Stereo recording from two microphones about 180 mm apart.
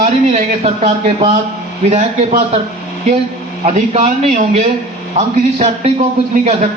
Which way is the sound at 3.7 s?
40° right (ahead or behind).